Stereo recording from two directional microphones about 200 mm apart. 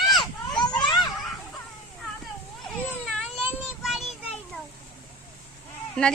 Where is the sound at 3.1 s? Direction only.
5° left (ahead or behind).